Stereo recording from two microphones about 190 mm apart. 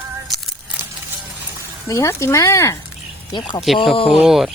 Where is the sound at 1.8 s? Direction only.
15° left (ahead or behind).